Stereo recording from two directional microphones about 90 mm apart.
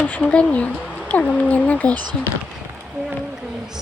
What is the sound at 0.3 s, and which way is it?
Speech, 15° left (ahead or behind).